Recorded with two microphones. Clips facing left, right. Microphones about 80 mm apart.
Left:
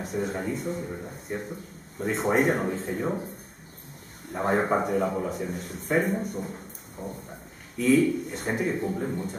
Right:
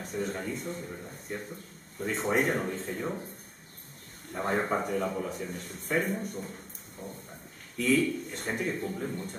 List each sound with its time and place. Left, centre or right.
0.0 s a man's voice: centre
4.3 s a man's voice: centre
8.8 s speech: left
9.1 s a man's voice: centre